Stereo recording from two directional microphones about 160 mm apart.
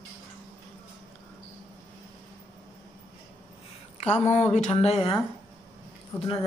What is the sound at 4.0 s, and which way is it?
Speech, 40° left (ahead or behind).